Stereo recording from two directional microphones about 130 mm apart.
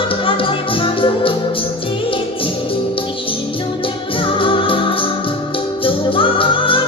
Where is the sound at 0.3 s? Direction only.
40° left (ahead or behind).